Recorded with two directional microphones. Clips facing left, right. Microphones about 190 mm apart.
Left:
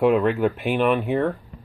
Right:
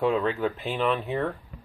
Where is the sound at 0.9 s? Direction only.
15° left (ahead or behind).